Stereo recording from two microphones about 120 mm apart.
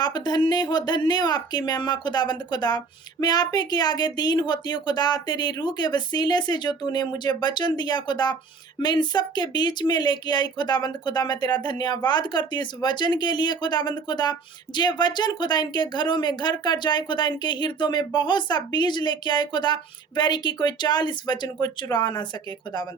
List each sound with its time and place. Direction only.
0.0 s speech: 35° left (ahead or behind)